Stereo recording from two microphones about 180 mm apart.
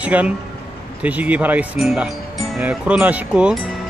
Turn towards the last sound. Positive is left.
turn(degrees=-5)  # may be behind; listen again after turning